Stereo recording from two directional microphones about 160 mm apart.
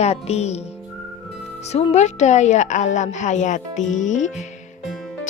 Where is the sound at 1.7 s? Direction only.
40° left (ahead or behind).